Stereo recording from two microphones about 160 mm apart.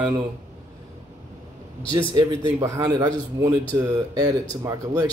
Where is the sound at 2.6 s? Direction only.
20° right (ahead or behind).